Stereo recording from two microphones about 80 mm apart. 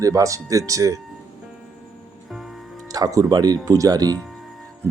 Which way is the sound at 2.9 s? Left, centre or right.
Right.